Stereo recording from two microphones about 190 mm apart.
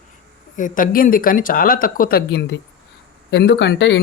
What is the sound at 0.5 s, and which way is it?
Speech, 45° left (ahead or behind).